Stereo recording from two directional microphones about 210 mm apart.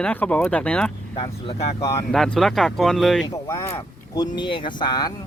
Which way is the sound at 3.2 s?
20° left (ahead or behind).